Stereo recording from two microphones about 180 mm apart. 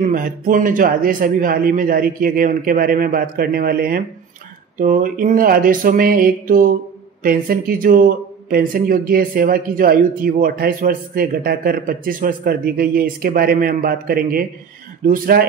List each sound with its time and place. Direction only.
0.0 s speech: 50° right (ahead or behind)